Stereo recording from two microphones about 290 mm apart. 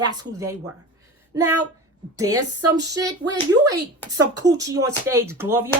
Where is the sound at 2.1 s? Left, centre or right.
Centre.